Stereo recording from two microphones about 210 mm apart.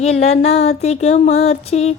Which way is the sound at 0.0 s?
30° left (ahead or behind).